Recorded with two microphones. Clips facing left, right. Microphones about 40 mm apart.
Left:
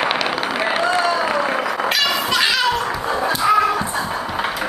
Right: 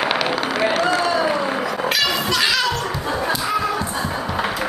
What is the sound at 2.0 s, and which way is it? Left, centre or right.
Children playing, centre.